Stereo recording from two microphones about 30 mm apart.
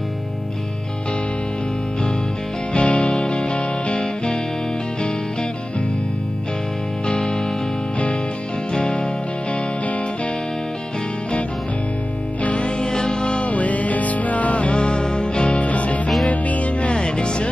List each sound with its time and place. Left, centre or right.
2.7 s music: left
7.1 s music: left
12.4 s music: left
13.4 s music: left
14.8 s music: left
15.6 s music: left
16.9 s music: left